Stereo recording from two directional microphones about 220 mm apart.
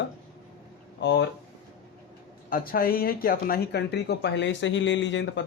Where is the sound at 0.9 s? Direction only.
55° left (ahead or behind).